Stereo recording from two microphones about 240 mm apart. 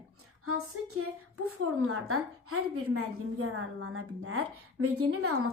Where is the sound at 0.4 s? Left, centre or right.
Right.